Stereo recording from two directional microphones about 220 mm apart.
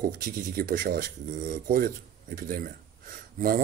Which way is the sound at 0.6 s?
40° right (ahead or behind).